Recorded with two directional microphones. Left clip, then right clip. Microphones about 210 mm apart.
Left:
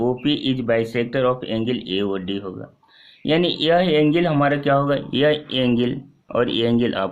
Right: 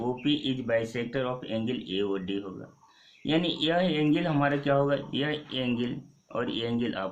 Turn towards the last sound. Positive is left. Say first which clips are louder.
# left 11 dB
turn(degrees=45)  # may be behind; listen again after turning